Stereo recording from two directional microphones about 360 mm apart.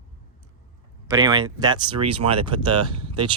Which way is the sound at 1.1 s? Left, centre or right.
Centre.